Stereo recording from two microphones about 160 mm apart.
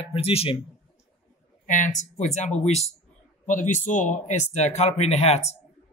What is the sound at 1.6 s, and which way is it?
Speech, 55° left (ahead or behind).